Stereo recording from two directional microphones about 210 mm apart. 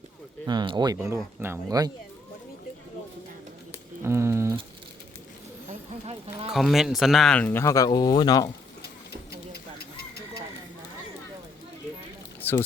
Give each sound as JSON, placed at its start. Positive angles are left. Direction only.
{"t": 0.4, "sound": "speech", "side_deg": -20}
{"t": 4.0, "sound": "speech", "side_deg": -10}
{"t": 6.5, "sound": "speech", "side_deg": 0}
{"t": 12.4, "sound": "squish", "side_deg": 10}